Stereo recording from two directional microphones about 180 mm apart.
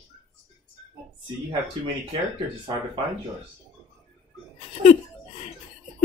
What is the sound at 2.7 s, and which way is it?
Speech, 25° right (ahead or behind).